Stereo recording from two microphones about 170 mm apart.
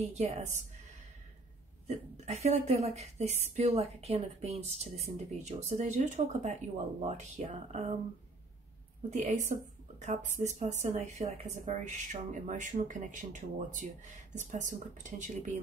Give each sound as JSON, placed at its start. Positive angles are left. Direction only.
{"t": 0.0, "sound": "a woman's voice", "side_deg": -40}
{"t": 1.9, "sound": "a woman's voice", "side_deg": -40}
{"t": 9.1, "sound": "speech", "side_deg": -45}